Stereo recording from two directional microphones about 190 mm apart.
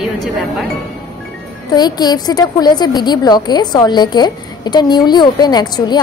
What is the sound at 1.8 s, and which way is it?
A woman's voice, 20° left (ahead or behind).